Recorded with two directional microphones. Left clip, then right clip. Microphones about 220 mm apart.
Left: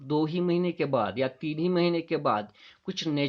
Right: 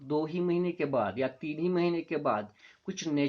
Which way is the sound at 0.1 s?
45° left (ahead or behind).